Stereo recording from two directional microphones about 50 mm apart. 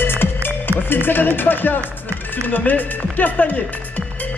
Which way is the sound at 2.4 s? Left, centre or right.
Left.